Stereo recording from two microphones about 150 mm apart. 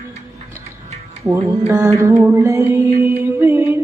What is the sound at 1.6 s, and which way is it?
Music, 15° right (ahead or behind).